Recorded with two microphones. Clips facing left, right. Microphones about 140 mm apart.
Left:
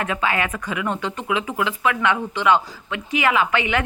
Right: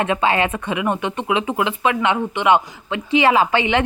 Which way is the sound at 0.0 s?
25° right (ahead or behind).